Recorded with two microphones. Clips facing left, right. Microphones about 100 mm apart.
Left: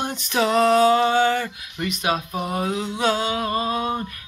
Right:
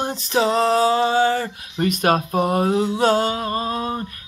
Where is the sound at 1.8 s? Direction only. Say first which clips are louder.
Right 6 dB; 50° right (ahead or behind).